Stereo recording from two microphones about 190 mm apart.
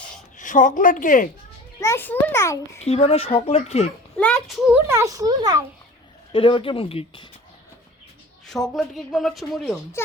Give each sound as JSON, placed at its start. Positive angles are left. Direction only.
{"t": 0.3, "sound": "a woman's voice", "side_deg": 45}
{"t": 1.8, "sound": "a child's voice", "side_deg": 10}
{"t": 2.8, "sound": "speech", "side_deg": 35}
{"t": 4.2, "sound": "a child's voice", "side_deg": 5}
{"t": 6.3, "sound": "speech", "side_deg": 25}
{"t": 8.4, "sound": "speech", "side_deg": 0}